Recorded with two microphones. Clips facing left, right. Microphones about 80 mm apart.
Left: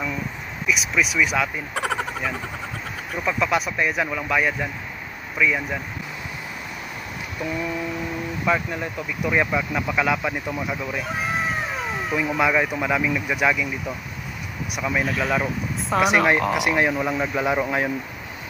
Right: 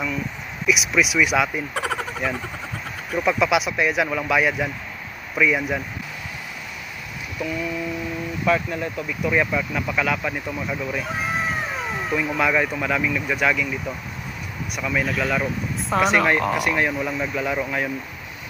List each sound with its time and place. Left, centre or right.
0.7 s speech: centre
7.4 s a sound: left
8.5 s speech: centre
15.0 s speech: centre
16.5 s speech: centre